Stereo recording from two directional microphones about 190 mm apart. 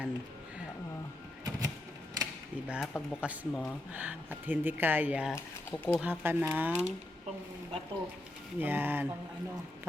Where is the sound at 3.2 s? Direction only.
10° right (ahead or behind).